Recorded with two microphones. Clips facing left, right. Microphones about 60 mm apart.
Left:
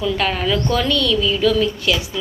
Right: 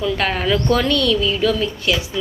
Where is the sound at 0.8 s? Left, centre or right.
Right.